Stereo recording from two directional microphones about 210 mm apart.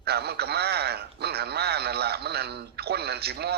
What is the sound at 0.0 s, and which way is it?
A man's voice, 50° right (ahead or behind).